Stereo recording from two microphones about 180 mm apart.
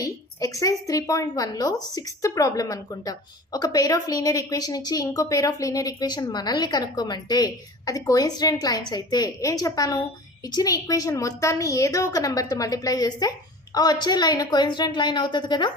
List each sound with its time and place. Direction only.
0.0 s a woman's voice: 20° left (ahead or behind)